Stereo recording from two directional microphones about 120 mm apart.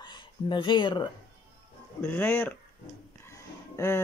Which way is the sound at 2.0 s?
20° left (ahead or behind).